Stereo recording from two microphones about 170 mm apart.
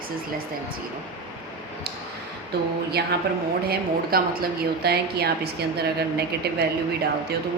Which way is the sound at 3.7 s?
65° right (ahead or behind).